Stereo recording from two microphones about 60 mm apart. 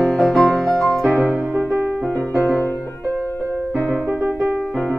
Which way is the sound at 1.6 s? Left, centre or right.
Right.